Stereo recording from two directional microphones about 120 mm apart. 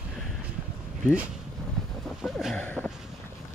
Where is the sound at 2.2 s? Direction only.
5° right (ahead or behind).